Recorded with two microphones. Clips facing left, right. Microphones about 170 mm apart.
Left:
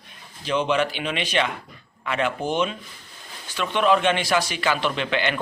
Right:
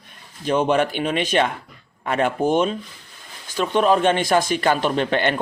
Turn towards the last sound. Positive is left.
turn(degrees=-45)  # may be behind; listen again after turning